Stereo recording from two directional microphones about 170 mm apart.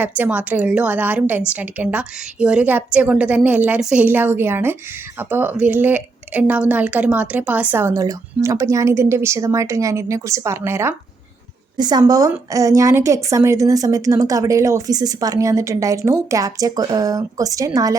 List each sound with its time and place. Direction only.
0.2 s a woman's voice: 10° right (ahead or behind)